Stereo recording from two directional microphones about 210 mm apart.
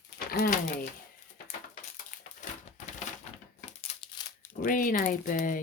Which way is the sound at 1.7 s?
40° left (ahead or behind).